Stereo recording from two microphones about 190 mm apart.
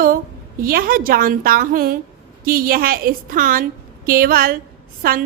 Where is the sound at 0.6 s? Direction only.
50° right (ahead or behind).